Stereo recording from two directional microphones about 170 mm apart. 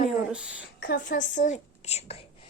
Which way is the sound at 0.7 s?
60° left (ahead or behind).